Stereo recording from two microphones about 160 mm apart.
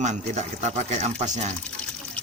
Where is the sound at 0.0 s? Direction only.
50° right (ahead or behind).